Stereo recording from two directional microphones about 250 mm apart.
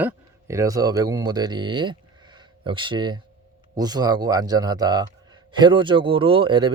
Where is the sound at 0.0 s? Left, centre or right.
Centre.